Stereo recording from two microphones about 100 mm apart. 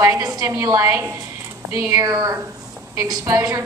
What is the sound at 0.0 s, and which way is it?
A woman's voice, 30° right (ahead or behind).